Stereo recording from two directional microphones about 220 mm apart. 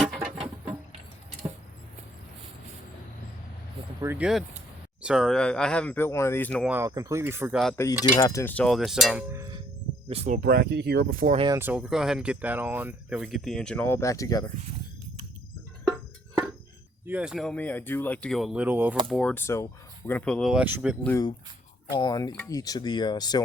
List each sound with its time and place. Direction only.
0.3 s rodents: 25° right (ahead or behind)
4.0 s speech: 5° right (ahead or behind)
6.7 s speech: 10° right (ahead or behind)
8.1 s speech: 10° left (ahead or behind)
9.3 s a sound: 15° right (ahead or behind)
10.1 s speech: 30° right (ahead or behind)
11.3 s speech: 15° right (ahead or behind); by 14.5 s 15° left (ahead or behind)
17.1 s speech: 5° right (ahead or behind)
19.0 s speech: 5° left (ahead or behind)
21.0 s speech: 10° left (ahead or behind)